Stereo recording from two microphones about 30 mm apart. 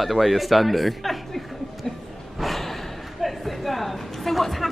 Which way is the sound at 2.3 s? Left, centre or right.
Centre.